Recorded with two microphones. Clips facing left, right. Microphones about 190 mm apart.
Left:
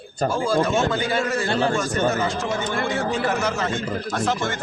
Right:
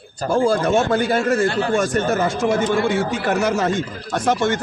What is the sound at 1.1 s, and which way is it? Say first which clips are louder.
Speech: right 6 dB; 55° right (ahead or behind).